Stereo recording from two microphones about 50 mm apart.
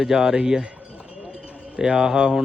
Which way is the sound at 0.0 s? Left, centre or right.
Centre.